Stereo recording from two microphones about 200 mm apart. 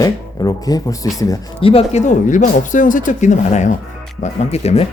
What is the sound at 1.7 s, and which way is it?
Speech, 35° left (ahead or behind).